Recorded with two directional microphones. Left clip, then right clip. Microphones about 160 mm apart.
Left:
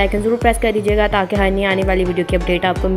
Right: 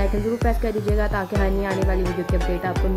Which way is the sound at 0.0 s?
25° left (ahead or behind).